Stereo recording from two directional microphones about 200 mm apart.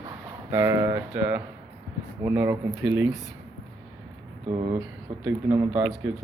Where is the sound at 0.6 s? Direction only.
15° right (ahead or behind).